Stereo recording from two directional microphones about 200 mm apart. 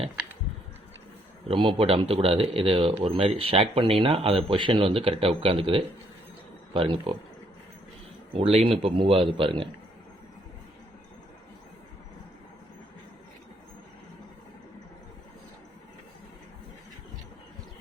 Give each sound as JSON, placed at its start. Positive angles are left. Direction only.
{"t": 1.5, "sound": "speech", "side_deg": -25}
{"t": 8.4, "sound": "speech", "side_deg": -30}